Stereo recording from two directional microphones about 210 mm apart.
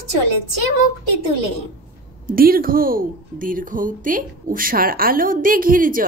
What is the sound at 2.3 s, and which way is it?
A woman's voice, 45° right (ahead or behind).